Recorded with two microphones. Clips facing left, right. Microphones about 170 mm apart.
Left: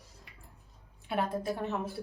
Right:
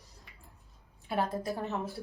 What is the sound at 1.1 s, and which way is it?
Speech, centre (ahead or behind).